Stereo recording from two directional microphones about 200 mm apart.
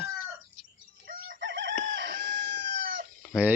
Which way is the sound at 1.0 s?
50° right (ahead or behind).